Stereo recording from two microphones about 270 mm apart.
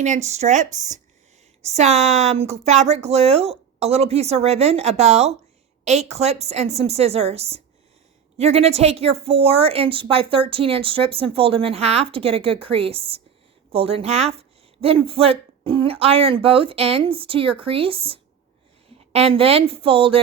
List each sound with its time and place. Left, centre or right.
0.0 s a woman's voice: right